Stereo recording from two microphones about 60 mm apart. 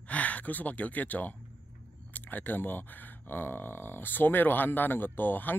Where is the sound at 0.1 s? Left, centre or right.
Left.